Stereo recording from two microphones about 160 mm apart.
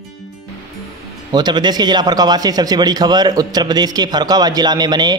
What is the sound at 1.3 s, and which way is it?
A man's voice, 25° right (ahead or behind).